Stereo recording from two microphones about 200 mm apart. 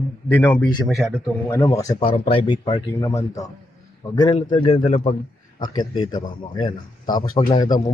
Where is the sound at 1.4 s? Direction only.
15° left (ahead or behind).